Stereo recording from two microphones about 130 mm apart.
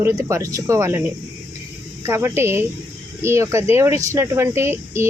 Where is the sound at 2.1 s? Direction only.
20° right (ahead or behind).